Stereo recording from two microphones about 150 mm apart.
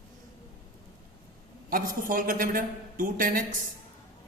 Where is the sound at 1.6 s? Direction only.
70° right (ahead or behind).